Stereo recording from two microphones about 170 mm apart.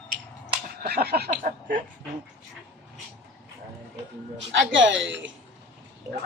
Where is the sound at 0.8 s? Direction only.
70° right (ahead or behind).